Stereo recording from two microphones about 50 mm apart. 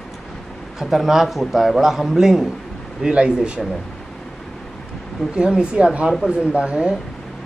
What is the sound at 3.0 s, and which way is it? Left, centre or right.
Speech, centre.